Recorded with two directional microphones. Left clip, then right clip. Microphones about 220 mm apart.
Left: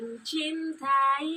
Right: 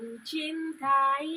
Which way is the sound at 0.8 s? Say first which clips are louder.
Left 1 dB; 20° left (ahead or behind).